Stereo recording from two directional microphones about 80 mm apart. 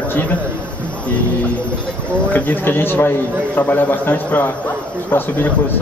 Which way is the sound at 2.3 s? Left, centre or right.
Left.